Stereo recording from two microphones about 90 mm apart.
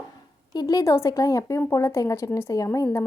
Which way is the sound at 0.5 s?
45° left (ahead or behind).